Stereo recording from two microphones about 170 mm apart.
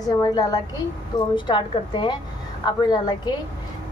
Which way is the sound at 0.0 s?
25° left (ahead or behind).